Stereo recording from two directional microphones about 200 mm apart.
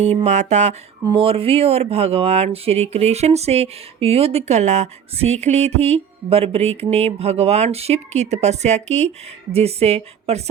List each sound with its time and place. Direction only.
0.0 s speech: 35° right (ahead or behind)